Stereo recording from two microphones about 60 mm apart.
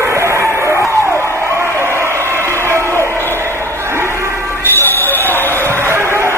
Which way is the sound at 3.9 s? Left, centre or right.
Right.